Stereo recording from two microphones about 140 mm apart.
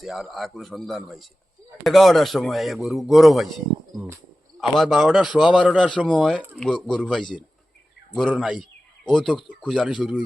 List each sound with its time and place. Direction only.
0.0 s a man's voice: centre (ahead or behind)
4.6 s a man's voice: centre (ahead or behind)
5.9 s a man's voice: 5° left (ahead or behind)
8.1 s a man's voice: 5° left (ahead or behind)